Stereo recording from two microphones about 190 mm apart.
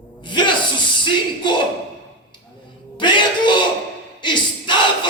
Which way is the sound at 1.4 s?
25° left (ahead or behind).